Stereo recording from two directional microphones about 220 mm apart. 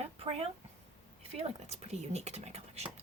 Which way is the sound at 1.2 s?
30° right (ahead or behind).